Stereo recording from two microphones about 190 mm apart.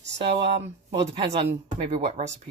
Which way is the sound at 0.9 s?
30° right (ahead or behind).